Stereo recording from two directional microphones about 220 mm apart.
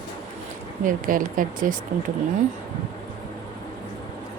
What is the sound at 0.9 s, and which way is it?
Speech, 40° right (ahead or behind).